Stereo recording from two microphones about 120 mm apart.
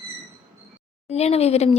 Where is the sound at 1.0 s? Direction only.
65° left (ahead or behind).